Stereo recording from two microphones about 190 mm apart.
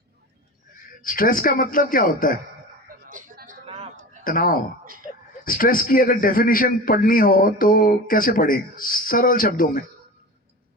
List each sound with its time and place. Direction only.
1.0 s a man's voice: 45° left (ahead or behind)
3.1 s a sound: 45° right (ahead or behind)
4.2 s a man's voice: 45° left (ahead or behind)